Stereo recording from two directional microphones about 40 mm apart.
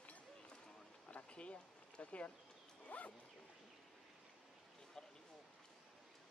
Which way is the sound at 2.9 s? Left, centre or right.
Left.